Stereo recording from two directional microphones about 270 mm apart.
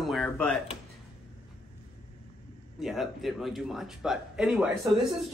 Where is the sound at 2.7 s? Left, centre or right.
Centre.